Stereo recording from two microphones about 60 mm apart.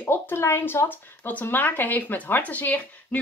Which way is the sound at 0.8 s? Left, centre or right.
Left.